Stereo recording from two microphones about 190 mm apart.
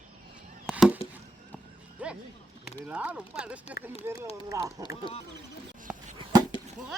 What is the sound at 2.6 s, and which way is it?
Speech, 5° right (ahead or behind).